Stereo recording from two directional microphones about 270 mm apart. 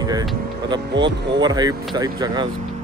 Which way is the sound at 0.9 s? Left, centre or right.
Right.